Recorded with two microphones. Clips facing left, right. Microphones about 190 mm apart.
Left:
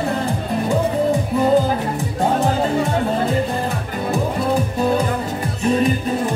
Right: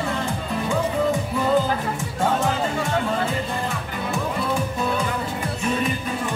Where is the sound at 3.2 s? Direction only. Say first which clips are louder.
Left 6 dB; 35° left (ahead or behind).